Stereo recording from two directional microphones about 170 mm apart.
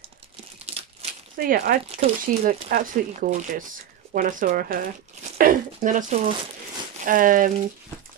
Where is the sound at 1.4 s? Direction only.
60° right (ahead or behind).